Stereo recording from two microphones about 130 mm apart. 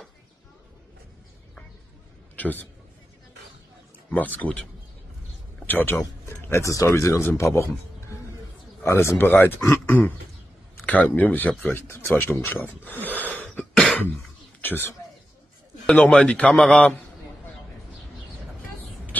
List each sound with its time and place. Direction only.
2.3 s a sound: 10° left (ahead or behind)
4.1 s a man's voice: 15° left (ahead or behind)
5.7 s speech: 15° left (ahead or behind)
8.8 s a man's voice: 20° left (ahead or behind)